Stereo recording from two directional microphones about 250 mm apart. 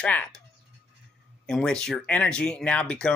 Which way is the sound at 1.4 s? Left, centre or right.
Centre.